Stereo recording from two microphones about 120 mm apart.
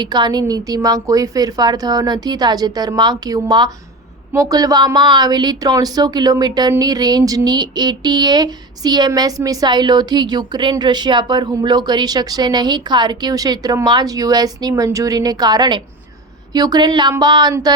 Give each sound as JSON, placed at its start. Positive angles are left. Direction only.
{"t": 0.0, "sound": "a woman's voice", "side_deg": -35}